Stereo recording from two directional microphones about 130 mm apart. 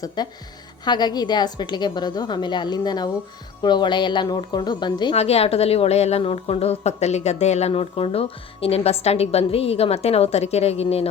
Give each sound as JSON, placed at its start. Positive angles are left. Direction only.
{"t": 0.2, "sound": "a woman's voice", "side_deg": 30}
{"t": 5.1, "sound": "a woman's voice", "side_deg": 50}